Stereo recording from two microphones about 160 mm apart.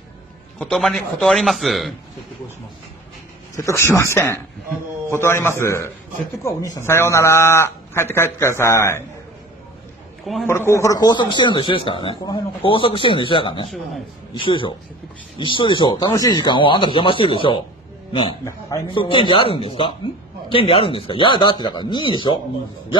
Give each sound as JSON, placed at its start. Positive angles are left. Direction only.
{"t": 0.6, "sound": "speech", "side_deg": 5}
{"t": 3.5, "sound": "a man's voice", "side_deg": 20}
{"t": 10.4, "sound": "speech", "side_deg": 15}
{"t": 18.4, "sound": "a man's voice", "side_deg": 20}
{"t": 18.9, "sound": "speech", "side_deg": 30}